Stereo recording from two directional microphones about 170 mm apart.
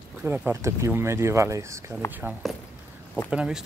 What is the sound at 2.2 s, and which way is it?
Speech, 5° right (ahead or behind).